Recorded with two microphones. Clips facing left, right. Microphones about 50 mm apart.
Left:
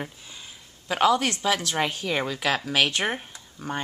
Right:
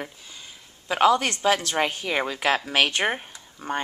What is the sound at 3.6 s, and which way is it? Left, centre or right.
Speech, right.